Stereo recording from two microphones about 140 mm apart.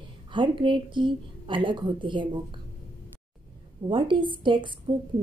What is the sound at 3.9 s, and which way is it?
Speech, 35° right (ahead or behind).